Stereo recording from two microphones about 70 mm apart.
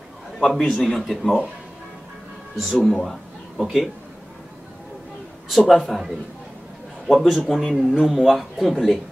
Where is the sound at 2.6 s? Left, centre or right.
Centre.